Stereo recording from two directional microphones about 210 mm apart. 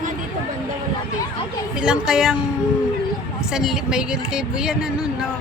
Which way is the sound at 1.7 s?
5° right (ahead or behind).